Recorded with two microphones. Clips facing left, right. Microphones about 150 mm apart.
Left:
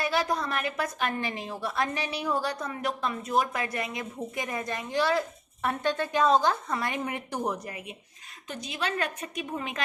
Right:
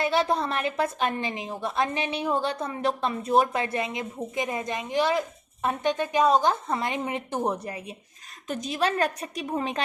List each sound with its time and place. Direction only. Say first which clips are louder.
0.0 s a woman's voice: right 4 dB; 25° right (ahead or behind)
8.4 s a woman's voice: right 6 dB; 45° right (ahead or behind)